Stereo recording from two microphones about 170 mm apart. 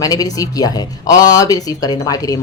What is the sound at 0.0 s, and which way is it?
A woman's voice, 20° left (ahead or behind).